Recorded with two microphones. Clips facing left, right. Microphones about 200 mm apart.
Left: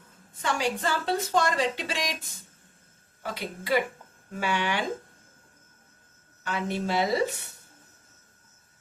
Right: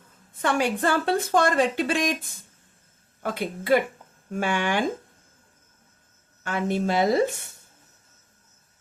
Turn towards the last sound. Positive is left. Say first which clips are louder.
# right 4 dB
turn(degrees=-50)  # may be behind; listen again after turning